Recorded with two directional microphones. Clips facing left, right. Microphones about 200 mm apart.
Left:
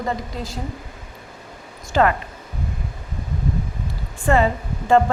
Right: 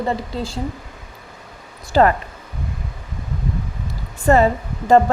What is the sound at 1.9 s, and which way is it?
Speech, 35° right (ahead or behind).